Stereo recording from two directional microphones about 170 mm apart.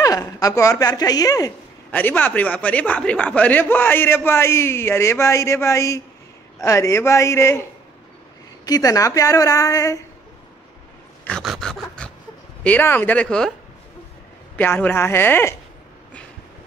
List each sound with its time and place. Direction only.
0.0 s a man's voice: 20° left (ahead or behind)
8.6 s a woman's voice: 20° left (ahead or behind)
11.2 s dog: centre (ahead or behind)
12.0 s a sound: 5° left (ahead or behind)
12.6 s a man's voice: 10° left (ahead or behind)
14.6 s a man's voice: 10° left (ahead or behind)